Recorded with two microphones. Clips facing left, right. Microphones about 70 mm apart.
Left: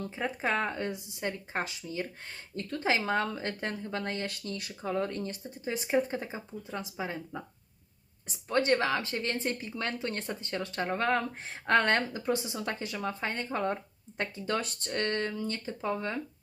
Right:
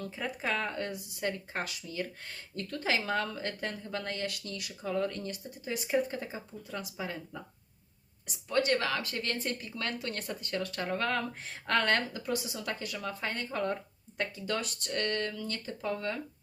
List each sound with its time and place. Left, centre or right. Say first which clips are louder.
0.0 s speech: left 3 dB; left